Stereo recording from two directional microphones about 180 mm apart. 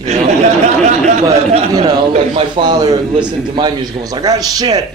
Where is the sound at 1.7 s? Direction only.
20° right (ahead or behind).